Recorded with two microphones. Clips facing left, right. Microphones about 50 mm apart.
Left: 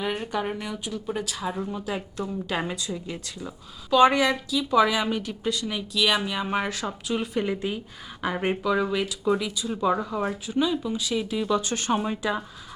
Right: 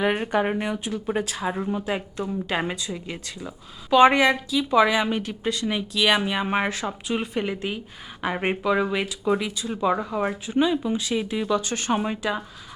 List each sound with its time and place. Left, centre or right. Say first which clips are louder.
0.0 s speech: right 5 dB; right; by 12.2 s centre
12.2 s speech: right 1 dB; centre